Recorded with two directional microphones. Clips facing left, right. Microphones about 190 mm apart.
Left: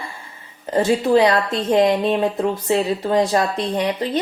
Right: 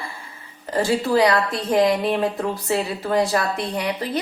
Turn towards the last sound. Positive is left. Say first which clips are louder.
# left 4 dB
turn(degrees=20)  # may be behind; listen again after turning